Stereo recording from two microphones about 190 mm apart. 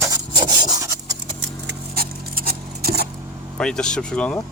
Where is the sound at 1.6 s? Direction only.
55° right (ahead or behind).